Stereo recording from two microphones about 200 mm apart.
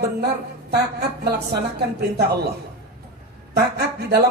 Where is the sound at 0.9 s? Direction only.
55° right (ahead or behind).